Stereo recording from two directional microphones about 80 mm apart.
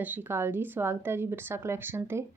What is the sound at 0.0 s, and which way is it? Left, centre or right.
A woman's voice, right.